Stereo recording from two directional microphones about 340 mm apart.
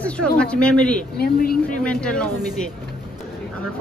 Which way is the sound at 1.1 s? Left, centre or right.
Left.